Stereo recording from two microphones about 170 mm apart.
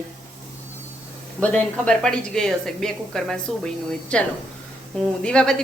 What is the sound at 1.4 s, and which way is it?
A woman's voice, 5° left (ahead or behind).